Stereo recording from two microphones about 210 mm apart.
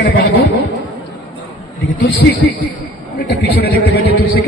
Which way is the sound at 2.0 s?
55° left (ahead or behind).